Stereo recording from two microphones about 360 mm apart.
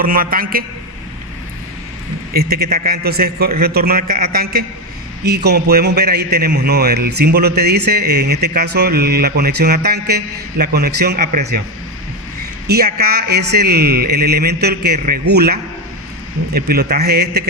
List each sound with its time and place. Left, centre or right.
0.0 s speech: right
2.3 s speech: right
12.6 s speech: right
16.6 s speech: right